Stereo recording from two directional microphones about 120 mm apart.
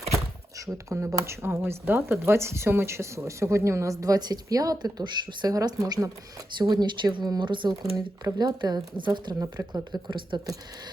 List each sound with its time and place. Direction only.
0.6 s a woman's voice: 25° right (ahead or behind)